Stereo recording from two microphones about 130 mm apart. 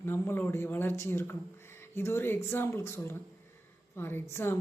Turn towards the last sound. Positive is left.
turn(degrees=20)  # may be behind; listen again after turning